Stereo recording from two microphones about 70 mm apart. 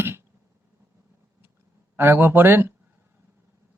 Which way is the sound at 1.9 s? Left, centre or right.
Right.